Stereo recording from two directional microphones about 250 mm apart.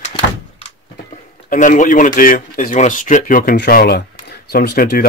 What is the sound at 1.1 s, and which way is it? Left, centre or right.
Speech, left.